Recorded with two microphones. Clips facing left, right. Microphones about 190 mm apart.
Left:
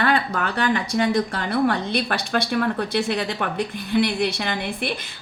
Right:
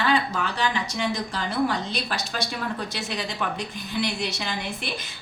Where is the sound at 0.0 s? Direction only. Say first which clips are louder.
Left 2 dB; 55° left (ahead or behind).